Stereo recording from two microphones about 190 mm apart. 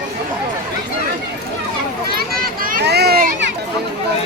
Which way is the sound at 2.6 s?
55° right (ahead or behind).